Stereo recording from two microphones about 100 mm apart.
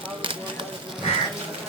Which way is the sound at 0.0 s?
60° right (ahead or behind).